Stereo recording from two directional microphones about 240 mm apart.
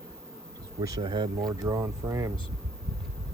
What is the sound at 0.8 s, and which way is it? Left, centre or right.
Speech, centre.